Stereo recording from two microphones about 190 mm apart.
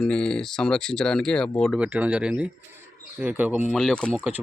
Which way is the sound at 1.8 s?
5° right (ahead or behind).